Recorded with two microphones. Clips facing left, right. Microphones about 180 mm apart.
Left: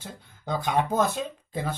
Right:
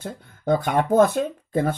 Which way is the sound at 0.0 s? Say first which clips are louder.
Right 10 dB; 55° right (ahead or behind).